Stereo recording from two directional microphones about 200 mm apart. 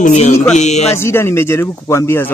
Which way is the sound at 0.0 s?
35° left (ahead or behind).